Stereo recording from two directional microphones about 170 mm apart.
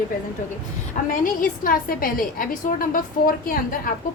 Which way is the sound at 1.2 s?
55° left (ahead or behind).